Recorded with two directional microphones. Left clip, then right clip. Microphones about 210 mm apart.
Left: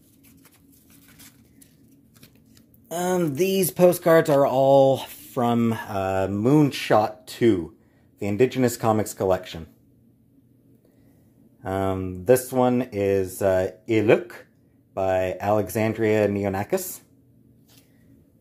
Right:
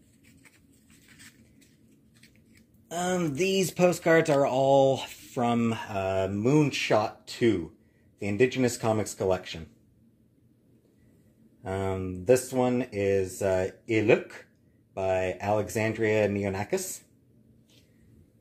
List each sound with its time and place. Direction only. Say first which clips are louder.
2.9 s speech: left 5 dB; 25° left (ahead or behind)
11.6 s speech: left 5 dB; 20° left (ahead or behind)